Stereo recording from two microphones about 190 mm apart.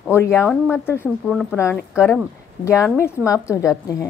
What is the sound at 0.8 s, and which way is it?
A woman's voice, 10° left (ahead or behind).